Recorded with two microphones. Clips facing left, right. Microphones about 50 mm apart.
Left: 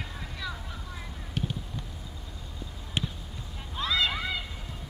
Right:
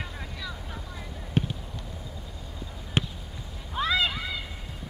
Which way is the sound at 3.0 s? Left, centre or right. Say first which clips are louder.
Right 4 dB; right.